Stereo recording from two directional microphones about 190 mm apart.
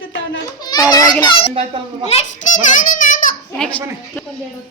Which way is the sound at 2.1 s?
40° left (ahead or behind).